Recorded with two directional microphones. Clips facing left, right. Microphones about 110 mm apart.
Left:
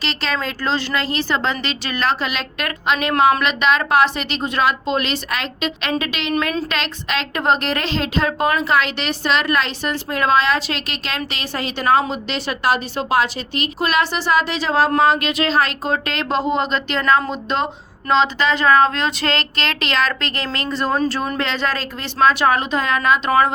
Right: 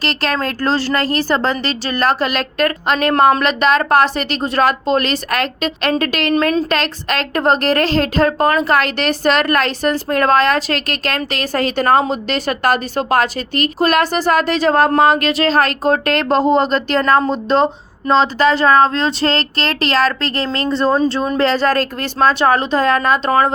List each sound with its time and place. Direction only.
0.0 s a woman's voice: 50° right (ahead or behind)
15.3 s speech: 40° right (ahead or behind)
22.3 s speech: 30° right (ahead or behind)